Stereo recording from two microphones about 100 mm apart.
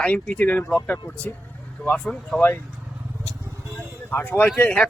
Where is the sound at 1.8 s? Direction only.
10° left (ahead or behind).